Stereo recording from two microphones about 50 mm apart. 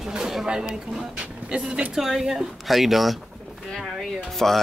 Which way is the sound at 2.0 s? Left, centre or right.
Centre.